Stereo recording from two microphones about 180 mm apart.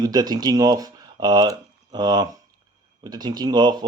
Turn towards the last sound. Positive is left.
turn(degrees=-25)  # may be behind; listen again after turning